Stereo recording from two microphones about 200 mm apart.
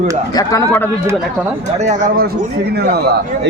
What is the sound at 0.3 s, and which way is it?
Speech, 15° left (ahead or behind).